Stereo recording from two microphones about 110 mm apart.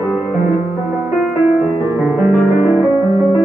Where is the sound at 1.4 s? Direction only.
15° right (ahead or behind).